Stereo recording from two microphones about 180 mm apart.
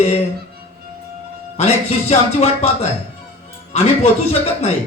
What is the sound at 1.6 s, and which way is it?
Speech, 35° left (ahead or behind).